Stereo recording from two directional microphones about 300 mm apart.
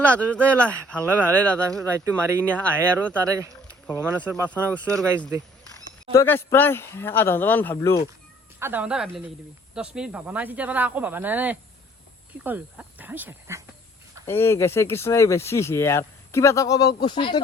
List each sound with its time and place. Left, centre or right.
0.0 s speech: centre
1.8 s speech: centre
2.5 s speech: centre
3.5 s a sound: centre
4.7 s speech: centre
8.5 s speech: centre
14.3 s speech: centre